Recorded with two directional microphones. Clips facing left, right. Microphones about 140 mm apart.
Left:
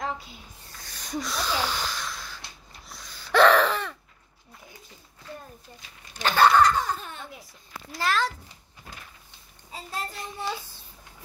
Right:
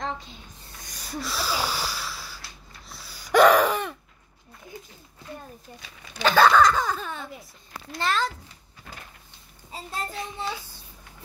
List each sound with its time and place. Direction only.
0.0 s a sound: 5° left (ahead or behind)
0.7 s wheeze: 15° right (ahead or behind)
6.0 s baby laughter: 90° right
7.9 s a child's voice: centre (ahead or behind)